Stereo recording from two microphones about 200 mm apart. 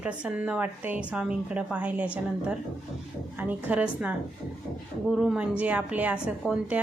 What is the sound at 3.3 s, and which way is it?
Speech, 5° right (ahead or behind).